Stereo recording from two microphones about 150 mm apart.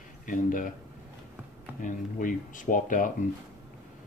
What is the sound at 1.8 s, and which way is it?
Speech, 65° left (ahead or behind).